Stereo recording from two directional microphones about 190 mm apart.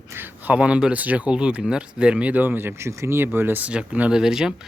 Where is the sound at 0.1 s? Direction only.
10° right (ahead or behind).